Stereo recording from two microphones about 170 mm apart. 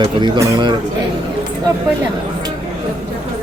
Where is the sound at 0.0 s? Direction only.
25° right (ahead or behind).